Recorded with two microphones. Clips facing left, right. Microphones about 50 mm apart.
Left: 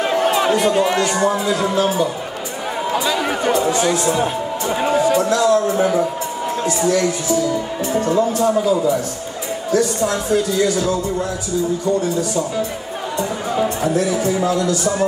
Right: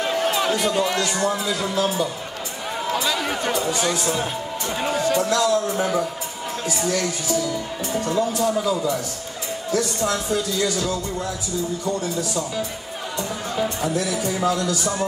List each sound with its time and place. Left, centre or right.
0.0 s speech: centre
9.7 s speech: centre
13.8 s a man's voice: centre